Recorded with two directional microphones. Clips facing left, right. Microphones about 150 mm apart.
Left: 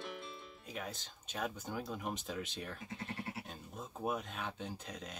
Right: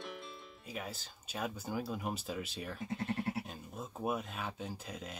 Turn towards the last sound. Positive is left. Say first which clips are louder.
# right 2 dB
turn(degrees=-5)  # may be behind; listen again after turning